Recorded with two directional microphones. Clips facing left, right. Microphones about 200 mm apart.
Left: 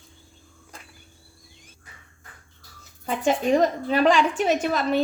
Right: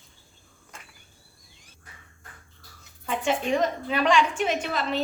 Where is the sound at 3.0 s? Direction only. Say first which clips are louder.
Left 4 dB; 40° left (ahead or behind).